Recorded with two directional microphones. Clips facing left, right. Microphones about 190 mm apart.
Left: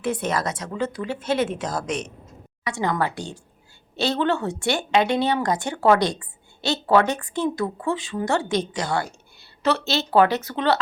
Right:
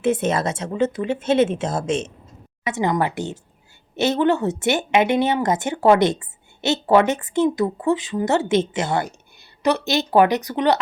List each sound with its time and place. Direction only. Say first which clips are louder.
0.0 s speech: right 5 dB; 25° right (ahead or behind)